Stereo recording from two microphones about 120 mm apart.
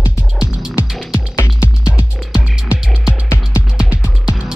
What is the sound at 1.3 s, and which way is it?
Music, 25° left (ahead or behind).